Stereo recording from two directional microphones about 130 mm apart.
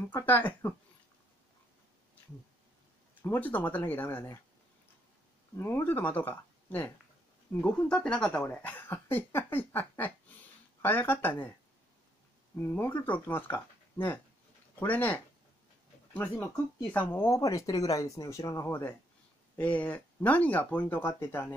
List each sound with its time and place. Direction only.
0.0 s speech: 15° left (ahead or behind)
3.2 s speech: 15° left (ahead or behind)
5.6 s speech: 20° left (ahead or behind)
12.5 s speech: 15° left (ahead or behind)